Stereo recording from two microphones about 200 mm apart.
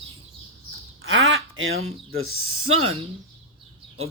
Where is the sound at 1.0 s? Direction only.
80° right.